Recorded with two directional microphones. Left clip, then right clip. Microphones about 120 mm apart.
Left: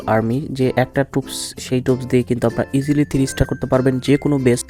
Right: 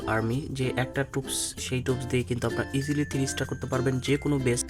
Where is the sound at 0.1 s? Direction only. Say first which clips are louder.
Left 11 dB; 45° left (ahead or behind).